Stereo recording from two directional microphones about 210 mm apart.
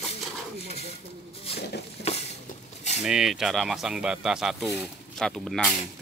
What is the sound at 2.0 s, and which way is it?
Stir, 50° left (ahead or behind).